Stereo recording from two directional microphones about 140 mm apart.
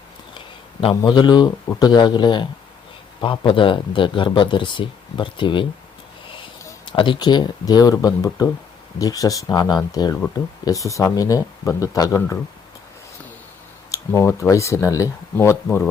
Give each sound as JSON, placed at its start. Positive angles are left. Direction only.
{"t": 0.3, "sound": "speech", "side_deg": 35}
{"t": 6.8, "sound": "speech", "side_deg": 35}
{"t": 13.9, "sound": "speech", "side_deg": 20}